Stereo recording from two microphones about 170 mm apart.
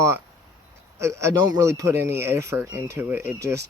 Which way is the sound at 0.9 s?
15° right (ahead or behind).